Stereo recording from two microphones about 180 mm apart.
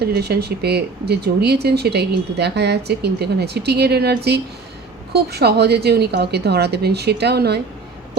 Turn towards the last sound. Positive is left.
turn(degrees=-65)  # may be behind; listen again after turning